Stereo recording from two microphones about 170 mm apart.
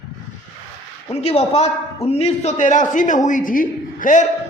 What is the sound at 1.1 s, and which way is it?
A man's voice, 35° left (ahead or behind).